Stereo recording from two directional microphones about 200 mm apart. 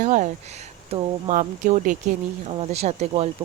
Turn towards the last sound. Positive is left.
turn(degrees=-30)  # may be behind; listen again after turning